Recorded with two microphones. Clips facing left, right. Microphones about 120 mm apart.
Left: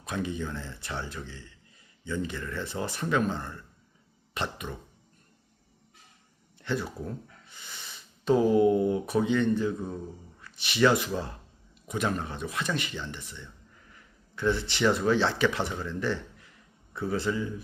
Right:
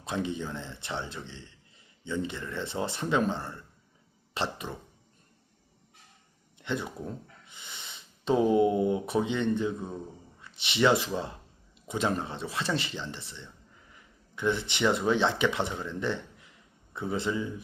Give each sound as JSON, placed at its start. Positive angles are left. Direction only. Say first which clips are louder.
{"t": 0.0, "sound": "speech", "louder": "even", "side_deg": -25}
{"t": 6.6, "sound": "speech", "louder": "left 1 dB", "side_deg": -20}